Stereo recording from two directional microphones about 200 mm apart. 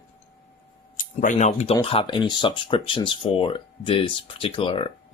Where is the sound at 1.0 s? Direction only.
40° left (ahead or behind).